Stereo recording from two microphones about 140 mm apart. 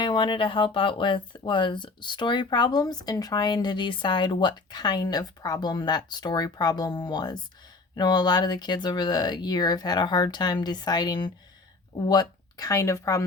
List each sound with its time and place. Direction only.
0.0 s speech: 35° left (ahead or behind)